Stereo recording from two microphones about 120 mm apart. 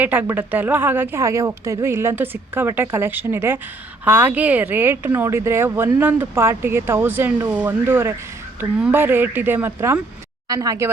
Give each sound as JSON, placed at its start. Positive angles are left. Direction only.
{"t": 0.0, "sound": "speech", "side_deg": -15}